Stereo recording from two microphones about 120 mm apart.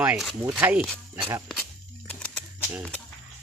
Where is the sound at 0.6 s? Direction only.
15° right (ahead or behind).